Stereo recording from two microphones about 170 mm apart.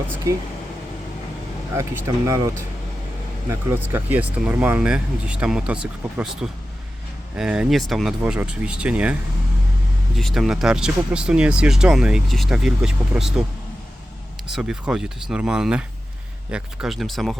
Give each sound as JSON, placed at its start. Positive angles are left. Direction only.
{"t": 1.7, "sound": "speech", "side_deg": -15}
{"t": 3.5, "sound": "speech", "side_deg": -15}
{"t": 10.2, "sound": "speech", "side_deg": 0}
{"t": 14.5, "sound": "speech", "side_deg": -5}